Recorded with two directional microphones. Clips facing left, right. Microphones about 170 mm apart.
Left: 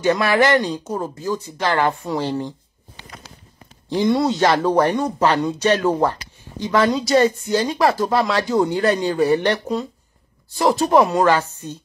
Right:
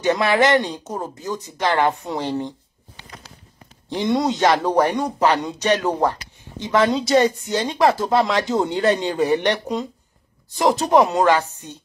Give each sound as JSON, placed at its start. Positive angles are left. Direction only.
{"t": 0.0, "sound": "speech", "side_deg": -20}
{"t": 3.9, "sound": "speech", "side_deg": -20}